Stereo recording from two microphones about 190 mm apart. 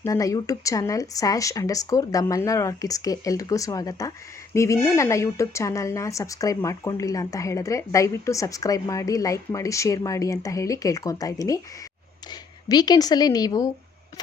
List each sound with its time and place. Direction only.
0.0 s a woman's voice: 15° left (ahead or behind)